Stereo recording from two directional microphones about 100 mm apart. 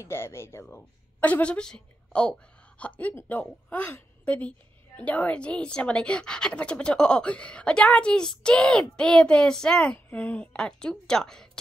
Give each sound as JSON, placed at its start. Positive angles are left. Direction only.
{"t": 0.0, "sound": "a woman's voice", "side_deg": 25}
{"t": 9.9, "sound": "a woman's voice", "side_deg": 20}